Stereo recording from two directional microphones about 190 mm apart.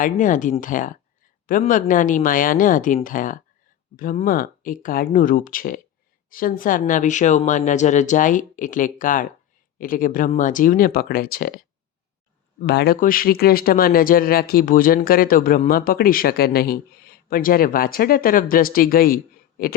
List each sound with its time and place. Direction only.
0.0 s speech: 45° left (ahead or behind)
12.6 s speech: 55° left (ahead or behind)